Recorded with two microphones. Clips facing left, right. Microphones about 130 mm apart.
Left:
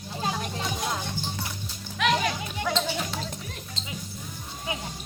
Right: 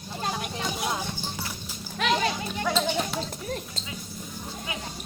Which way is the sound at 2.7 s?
5° right (ahead or behind).